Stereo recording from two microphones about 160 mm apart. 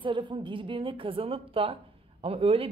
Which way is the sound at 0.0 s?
30° right (ahead or behind).